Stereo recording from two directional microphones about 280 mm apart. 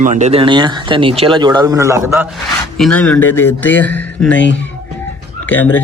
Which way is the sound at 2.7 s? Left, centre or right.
Centre.